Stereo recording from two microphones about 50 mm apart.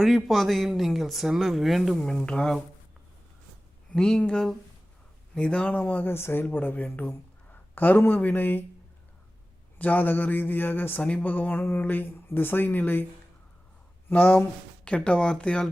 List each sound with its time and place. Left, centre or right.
0.0 s speech: centre
2.0 s speech: centre
3.9 s speech: centre
5.3 s a man's voice: left
6.1 s a man's voice: left
9.7 s a man's voice: left
11.0 s a man's voice: left
14.1 s a man's voice: left
14.8 s speech: left